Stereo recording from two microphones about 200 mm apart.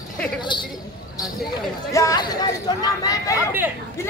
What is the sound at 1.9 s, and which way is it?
Speech, 15° left (ahead or behind).